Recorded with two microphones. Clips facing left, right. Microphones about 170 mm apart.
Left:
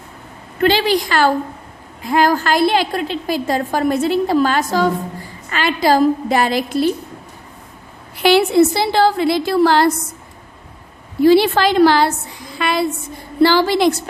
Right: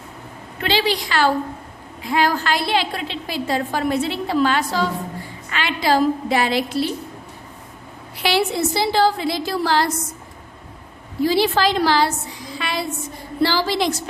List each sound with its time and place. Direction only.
0.6 s a woman's voice: 50° left (ahead or behind)
8.1 s a woman's voice: 55° left (ahead or behind)
11.2 s a woman's voice: 60° left (ahead or behind)